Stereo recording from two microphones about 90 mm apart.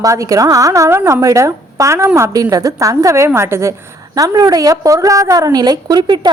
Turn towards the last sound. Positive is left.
turn(degrees=-55)  # may be behind; listen again after turning